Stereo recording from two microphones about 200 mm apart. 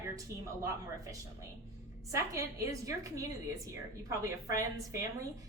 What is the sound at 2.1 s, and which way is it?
Speech, 15° right (ahead or behind).